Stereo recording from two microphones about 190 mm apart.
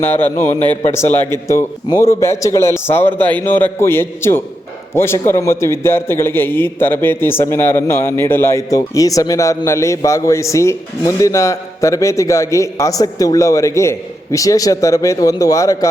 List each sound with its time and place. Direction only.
0.0 s a man's voice: 10° left (ahead or behind)